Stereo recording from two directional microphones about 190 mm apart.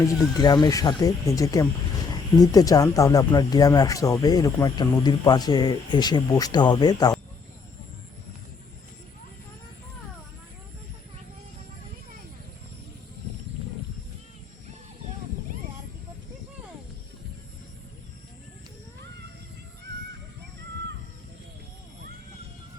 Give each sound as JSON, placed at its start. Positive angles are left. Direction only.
{"t": 0.0, "sound": "speech", "side_deg": 20}